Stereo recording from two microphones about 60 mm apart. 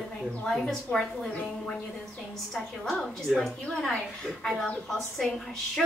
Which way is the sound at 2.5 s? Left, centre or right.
Centre.